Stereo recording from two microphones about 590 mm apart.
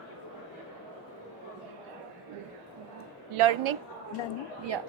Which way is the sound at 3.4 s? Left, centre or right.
Right.